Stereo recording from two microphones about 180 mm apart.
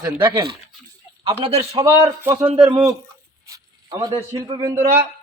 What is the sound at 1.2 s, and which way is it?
Speech, 30° right (ahead or behind).